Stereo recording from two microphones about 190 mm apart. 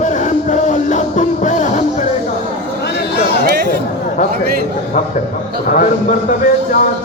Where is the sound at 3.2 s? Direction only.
55° left (ahead or behind).